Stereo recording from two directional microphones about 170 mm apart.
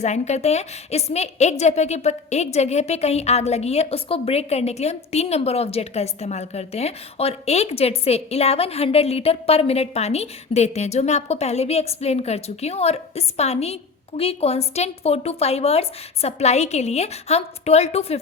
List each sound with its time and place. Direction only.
0.0 s a woman's voice: 40° left (ahead or behind)